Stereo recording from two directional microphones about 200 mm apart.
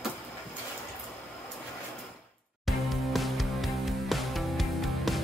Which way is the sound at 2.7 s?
Centre (ahead or behind).